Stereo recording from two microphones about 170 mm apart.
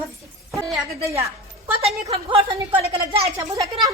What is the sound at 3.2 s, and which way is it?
Speech, 20° right (ahead or behind).